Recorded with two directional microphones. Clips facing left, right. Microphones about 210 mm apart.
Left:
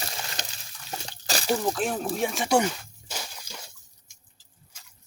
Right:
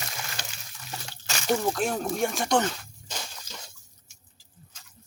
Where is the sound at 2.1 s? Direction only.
Centre (ahead or behind).